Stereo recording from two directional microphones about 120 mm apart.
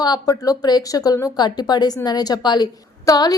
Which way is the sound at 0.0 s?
35° left (ahead or behind).